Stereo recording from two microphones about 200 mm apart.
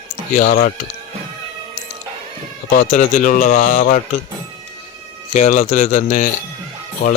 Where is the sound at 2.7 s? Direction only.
40° left (ahead or behind).